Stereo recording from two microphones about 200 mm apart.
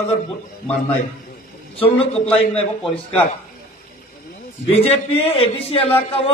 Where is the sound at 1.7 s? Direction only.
30° left (ahead or behind).